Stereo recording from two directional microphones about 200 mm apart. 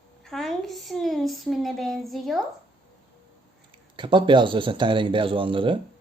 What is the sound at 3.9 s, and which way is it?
Speech, 25° right (ahead or behind).